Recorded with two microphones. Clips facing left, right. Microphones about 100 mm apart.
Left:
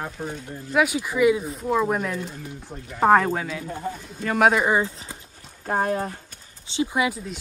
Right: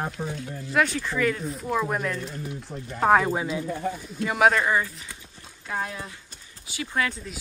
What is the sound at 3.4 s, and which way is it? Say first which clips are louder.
Speech: right 2 dB; 20° right (ahead or behind).